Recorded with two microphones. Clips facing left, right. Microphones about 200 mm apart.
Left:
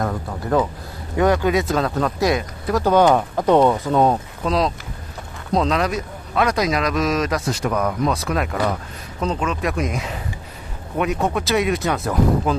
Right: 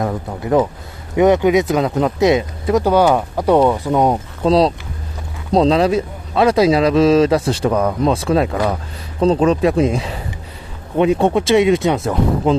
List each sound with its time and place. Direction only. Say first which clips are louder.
0.0 s a sound: right 3 dB; 15° right (ahead or behind)
1.1 s speech: right 5 dB; 20° right (ahead or behind)
2.8 s speech: even; 10° right (ahead or behind)
4.4 s speech: right 7 dB; 30° right (ahead or behind)